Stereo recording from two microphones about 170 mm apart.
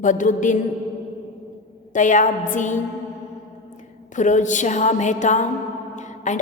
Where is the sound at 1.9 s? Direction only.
50° left (ahead or behind).